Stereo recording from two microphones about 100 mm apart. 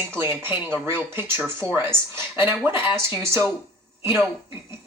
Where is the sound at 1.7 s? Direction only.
25° right (ahead or behind).